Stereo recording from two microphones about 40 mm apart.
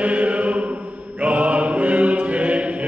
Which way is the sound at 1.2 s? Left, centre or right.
Right.